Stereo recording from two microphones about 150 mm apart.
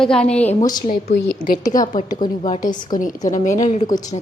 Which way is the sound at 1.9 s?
60° left (ahead or behind).